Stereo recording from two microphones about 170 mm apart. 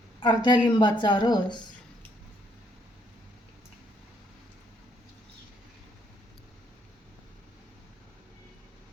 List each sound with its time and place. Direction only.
0.2 s a woman's voice: 25° left (ahead or behind)